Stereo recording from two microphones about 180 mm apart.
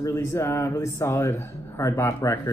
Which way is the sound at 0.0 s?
15° left (ahead or behind).